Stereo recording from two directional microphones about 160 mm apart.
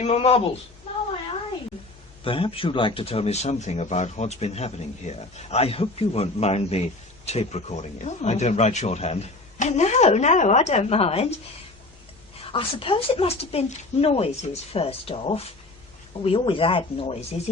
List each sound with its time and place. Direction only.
0.0 s speech: 40° left (ahead or behind)
2.2 s speech: 35° left (ahead or behind)
12.5 s speech: 35° left (ahead or behind)